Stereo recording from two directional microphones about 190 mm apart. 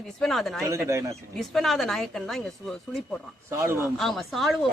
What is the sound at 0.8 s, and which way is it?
Speech, 15° right (ahead or behind).